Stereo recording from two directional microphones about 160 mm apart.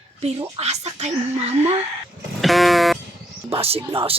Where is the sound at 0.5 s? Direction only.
40° right (ahead or behind).